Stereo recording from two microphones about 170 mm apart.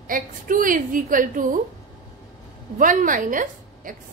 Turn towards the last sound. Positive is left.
turn(degrees=-50)  # may be behind; listen again after turning